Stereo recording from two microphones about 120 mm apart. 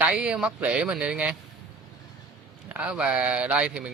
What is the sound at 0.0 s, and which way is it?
Speech, 10° right (ahead or behind).